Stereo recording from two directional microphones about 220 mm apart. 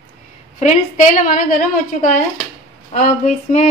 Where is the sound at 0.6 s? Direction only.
35° left (ahead or behind).